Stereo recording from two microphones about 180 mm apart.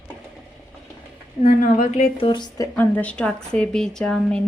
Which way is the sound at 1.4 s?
45° left (ahead or behind).